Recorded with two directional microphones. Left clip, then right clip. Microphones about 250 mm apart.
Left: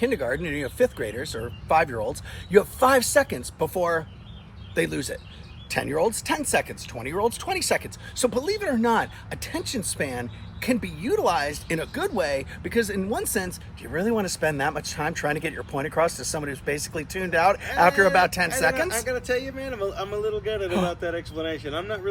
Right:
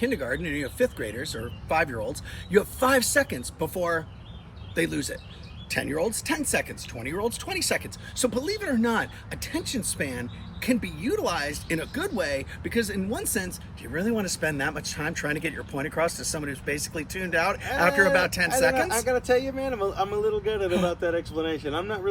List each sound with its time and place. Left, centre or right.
0.0 s speech: centre
18.9 s speech: centre